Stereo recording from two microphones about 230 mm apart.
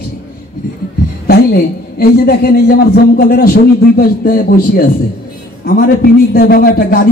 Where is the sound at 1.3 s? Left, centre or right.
Left.